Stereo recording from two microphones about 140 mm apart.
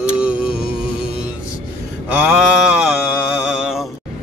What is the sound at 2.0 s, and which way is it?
Speech, 10° right (ahead or behind).